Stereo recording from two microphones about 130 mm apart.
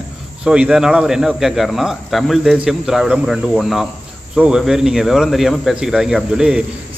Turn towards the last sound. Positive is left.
turn(degrees=-5)  # may be behind; listen again after turning